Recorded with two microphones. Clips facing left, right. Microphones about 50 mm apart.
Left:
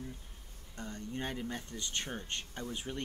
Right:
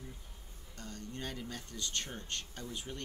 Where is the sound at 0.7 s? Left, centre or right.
Left.